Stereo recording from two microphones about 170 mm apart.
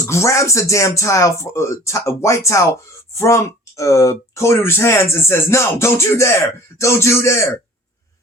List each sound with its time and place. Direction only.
0.1 s speech: 15° left (ahead or behind)